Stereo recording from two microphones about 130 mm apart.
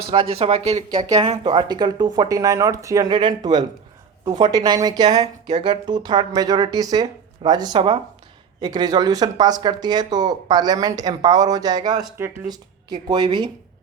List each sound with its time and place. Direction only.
0.1 s speech: 45° right (ahead or behind)
0.9 s speech: 30° right (ahead or behind)
7.8 s speech: 45° right (ahead or behind)
8.6 s speech: 30° right (ahead or behind)
12.1 s speech: 15° right (ahead or behind)
12.5 s speech: 35° right (ahead or behind)